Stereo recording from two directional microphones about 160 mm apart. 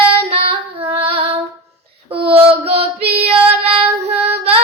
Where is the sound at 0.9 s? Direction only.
35° right (ahead or behind).